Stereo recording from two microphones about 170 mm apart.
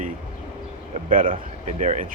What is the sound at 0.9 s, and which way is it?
Speech, 55° right (ahead or behind).